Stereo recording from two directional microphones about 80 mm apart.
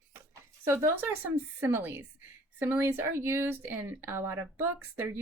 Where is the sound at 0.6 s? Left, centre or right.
Right.